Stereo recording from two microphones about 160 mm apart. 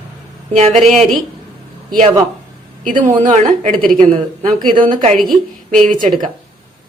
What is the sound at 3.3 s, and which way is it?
Speech, 45° right (ahead or behind).